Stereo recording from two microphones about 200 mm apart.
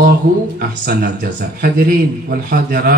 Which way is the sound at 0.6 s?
45° right (ahead or behind).